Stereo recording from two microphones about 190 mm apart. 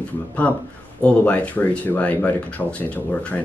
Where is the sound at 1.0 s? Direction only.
5° left (ahead or behind).